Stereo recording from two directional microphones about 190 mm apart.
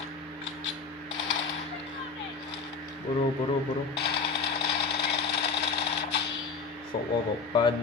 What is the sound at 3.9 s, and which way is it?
Jackhammer, 60° left (ahead or behind).